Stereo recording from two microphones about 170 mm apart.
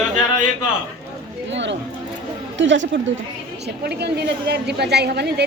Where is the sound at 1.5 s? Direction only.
90° right.